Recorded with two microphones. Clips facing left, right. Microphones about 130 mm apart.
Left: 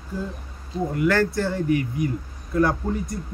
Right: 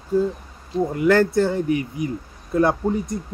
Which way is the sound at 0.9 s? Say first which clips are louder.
Right 4 dB; 20° right (ahead or behind).